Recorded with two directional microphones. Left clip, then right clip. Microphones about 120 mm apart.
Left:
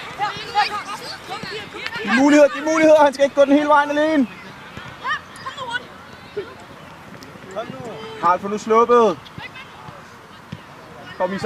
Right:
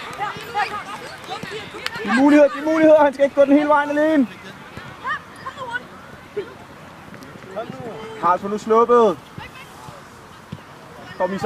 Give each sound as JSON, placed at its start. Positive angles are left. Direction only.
{"t": 0.2, "sound": "a sound", "side_deg": 20}
{"t": 2.0, "sound": "speech", "side_deg": 5}
{"t": 2.2, "sound": "speech", "side_deg": 40}
{"t": 5.0, "sound": "a sound", "side_deg": 20}
{"t": 7.6, "sound": "speech", "side_deg": 30}
{"t": 8.2, "sound": "speech", "side_deg": 10}
{"t": 11.2, "sound": "speech", "side_deg": 0}